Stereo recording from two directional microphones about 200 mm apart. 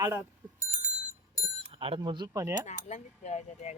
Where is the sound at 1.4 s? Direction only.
25° right (ahead or behind).